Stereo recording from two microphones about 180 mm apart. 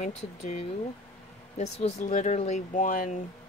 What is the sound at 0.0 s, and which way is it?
Speech, 35° left (ahead or behind).